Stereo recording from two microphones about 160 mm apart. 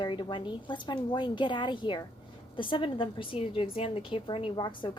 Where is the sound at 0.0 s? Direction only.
30° left (ahead or behind).